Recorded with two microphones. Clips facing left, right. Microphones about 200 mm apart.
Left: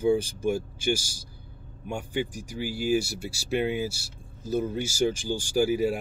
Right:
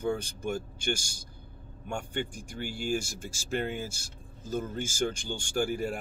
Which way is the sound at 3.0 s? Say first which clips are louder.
Left 7 dB; 45° right (ahead or behind).